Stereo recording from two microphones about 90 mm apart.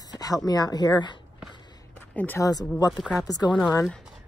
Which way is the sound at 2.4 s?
45° left (ahead or behind).